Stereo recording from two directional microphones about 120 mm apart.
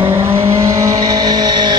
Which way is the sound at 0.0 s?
20° right (ahead or behind).